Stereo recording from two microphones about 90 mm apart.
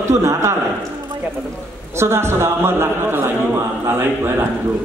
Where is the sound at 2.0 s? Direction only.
30° right (ahead or behind).